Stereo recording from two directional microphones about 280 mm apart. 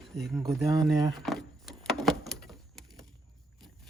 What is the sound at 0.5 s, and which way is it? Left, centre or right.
Speech, centre.